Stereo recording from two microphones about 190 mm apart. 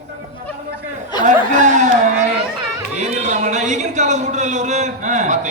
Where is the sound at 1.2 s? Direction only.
40° right (ahead or behind).